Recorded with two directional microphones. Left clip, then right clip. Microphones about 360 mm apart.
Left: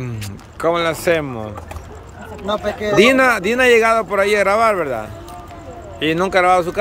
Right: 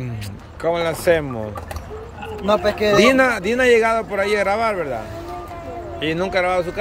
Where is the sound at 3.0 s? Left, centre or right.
Centre.